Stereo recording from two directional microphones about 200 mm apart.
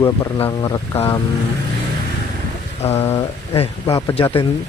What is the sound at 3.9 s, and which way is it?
Speech, 15° left (ahead or behind).